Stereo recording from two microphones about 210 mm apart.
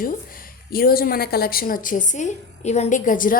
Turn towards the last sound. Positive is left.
turn(degrees=40)  # may be behind; listen again after turning